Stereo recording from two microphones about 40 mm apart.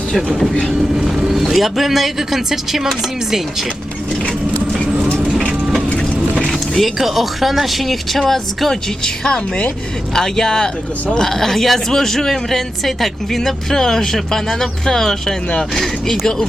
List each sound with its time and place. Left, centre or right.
1.0 s speech: centre
6.5 s mechanisms: centre
7.0 s speech: centre
9.2 s a woman's voice: left
10.2 s speech: centre